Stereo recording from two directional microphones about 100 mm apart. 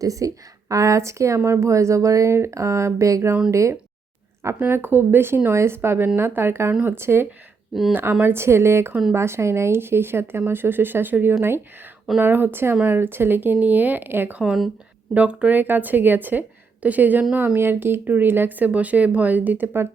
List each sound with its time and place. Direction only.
0.0 s speech: 35° right (ahead or behind)
7.7 s speech: centre (ahead or behind)
8.2 s speech: 25° right (ahead or behind)
14.4 s speech: 5° right (ahead or behind); by 19.9 s 20° right (ahead or behind)